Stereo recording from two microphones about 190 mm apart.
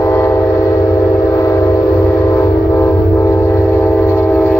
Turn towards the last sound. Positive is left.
turn(degrees=10)  # may be behind; listen again after turning